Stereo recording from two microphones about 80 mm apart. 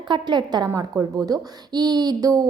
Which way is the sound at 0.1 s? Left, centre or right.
Right.